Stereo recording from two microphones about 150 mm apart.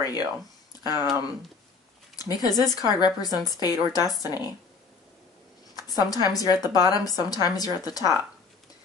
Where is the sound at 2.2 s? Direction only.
25° left (ahead or behind).